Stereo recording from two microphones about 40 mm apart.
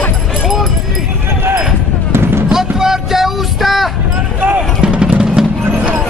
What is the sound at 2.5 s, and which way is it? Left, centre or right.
Music, centre.